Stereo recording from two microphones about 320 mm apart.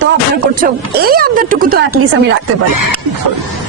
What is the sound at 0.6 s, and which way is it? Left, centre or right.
Speech, right.